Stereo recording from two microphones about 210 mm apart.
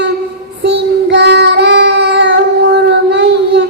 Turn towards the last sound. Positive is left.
turn(degrees=-55)  # may be behind; listen again after turning